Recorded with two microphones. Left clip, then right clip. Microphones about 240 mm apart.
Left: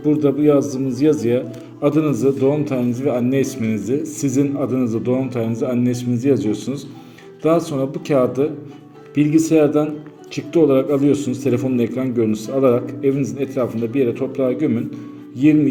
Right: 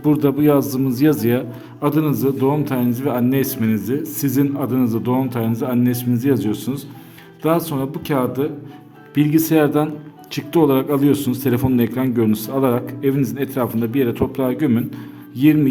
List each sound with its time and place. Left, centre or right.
0.0 s a man's voice: right